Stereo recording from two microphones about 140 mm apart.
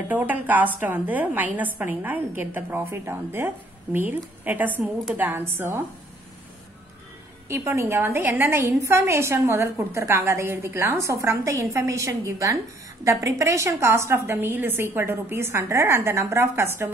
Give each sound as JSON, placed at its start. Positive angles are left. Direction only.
{"t": 0.1, "sound": "a woman's voice", "side_deg": -10}
{"t": 7.4, "sound": "a woman's voice", "side_deg": -15}